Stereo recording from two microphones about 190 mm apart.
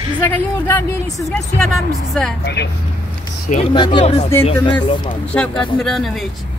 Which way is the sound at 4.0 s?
35° left (ahead or behind).